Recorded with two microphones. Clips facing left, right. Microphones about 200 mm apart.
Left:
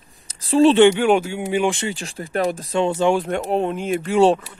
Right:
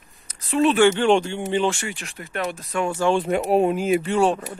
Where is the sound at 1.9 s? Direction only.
30° left (ahead or behind).